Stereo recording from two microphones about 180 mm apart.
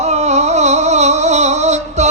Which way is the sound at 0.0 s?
40° right (ahead or behind).